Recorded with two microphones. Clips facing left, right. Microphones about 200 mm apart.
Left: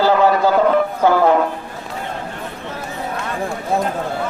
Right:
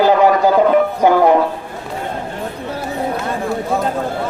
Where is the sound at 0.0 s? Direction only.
15° right (ahead or behind).